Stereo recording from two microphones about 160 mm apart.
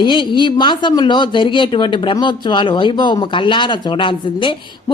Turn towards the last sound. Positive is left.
turn(degrees=30)  # may be behind; listen again after turning